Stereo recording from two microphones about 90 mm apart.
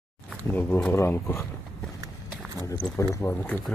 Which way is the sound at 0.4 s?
20° left (ahead or behind).